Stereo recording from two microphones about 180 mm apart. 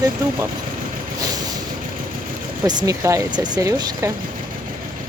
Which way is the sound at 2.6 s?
20° right (ahead or behind).